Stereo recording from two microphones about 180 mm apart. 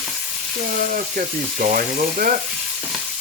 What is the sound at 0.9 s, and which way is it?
Speech, 50° right (ahead or behind).